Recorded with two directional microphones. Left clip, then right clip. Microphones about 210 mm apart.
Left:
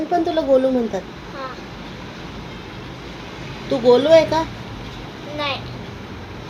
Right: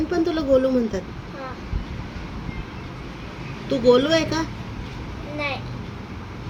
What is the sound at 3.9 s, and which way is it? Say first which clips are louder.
Speech: left 7 dB; 35° right (ahead or behind).